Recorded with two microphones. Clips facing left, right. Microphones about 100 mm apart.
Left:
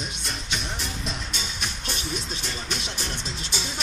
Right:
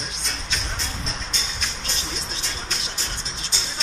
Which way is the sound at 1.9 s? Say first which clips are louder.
Left 1 dB; 50° left (ahead or behind).